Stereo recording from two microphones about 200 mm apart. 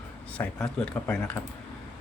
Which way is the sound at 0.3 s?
5° left (ahead or behind).